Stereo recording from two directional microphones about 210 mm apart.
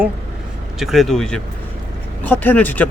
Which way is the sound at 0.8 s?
Centre (ahead or behind).